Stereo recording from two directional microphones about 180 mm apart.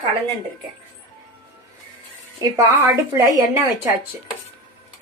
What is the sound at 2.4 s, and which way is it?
Speech, 20° right (ahead or behind).